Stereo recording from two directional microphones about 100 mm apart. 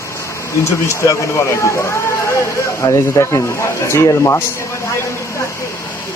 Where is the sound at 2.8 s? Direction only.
35° left (ahead or behind).